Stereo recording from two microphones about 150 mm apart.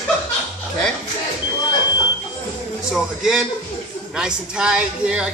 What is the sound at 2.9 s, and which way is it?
A man's voice, 5° right (ahead or behind).